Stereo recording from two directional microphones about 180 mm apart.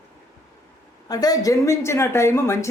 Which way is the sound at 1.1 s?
20° left (ahead or behind).